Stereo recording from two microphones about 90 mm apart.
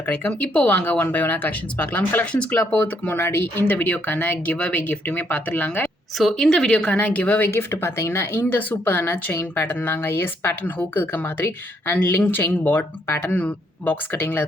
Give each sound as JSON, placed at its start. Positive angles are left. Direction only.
{"t": 0.1, "sound": "a woman's voice", "side_deg": 10}
{"t": 6.1, "sound": "a woman's voice", "side_deg": 5}